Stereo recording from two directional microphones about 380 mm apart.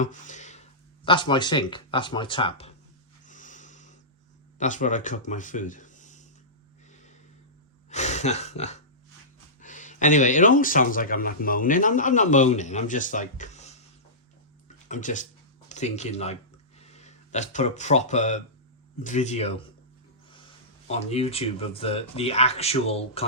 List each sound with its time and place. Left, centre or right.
0.0 s speech: centre
3.2 s snort: centre
4.5 s speech: centre
6.9 s a sound: centre
7.9 s speech: centre
14.8 s speech: centre
20.8 s speech: centre